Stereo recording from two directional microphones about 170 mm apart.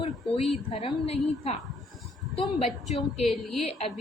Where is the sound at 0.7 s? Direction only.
35° left (ahead or behind).